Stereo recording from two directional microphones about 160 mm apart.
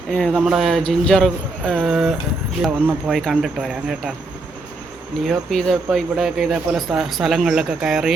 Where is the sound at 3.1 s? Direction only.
Centre (ahead or behind).